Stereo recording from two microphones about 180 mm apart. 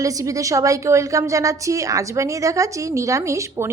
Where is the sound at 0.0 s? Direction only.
20° right (ahead or behind).